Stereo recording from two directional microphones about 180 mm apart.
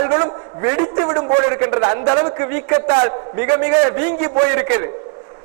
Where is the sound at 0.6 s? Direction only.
25° right (ahead or behind).